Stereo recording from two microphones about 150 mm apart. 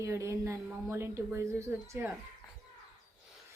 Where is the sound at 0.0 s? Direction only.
20° right (ahead or behind).